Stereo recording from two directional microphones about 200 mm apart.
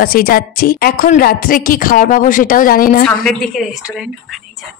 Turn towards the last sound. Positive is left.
turn(degrees=-5)  # may be behind; listen again after turning